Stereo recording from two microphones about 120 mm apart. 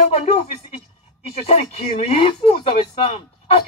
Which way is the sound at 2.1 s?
50° left (ahead or behind).